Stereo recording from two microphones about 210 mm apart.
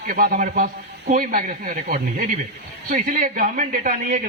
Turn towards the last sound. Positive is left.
turn(degrees=-40)  # may be behind; listen again after turning